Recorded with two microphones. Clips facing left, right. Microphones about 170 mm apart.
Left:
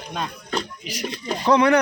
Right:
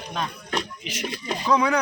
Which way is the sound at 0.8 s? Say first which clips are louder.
Left 2 dB; 35° left (ahead or behind).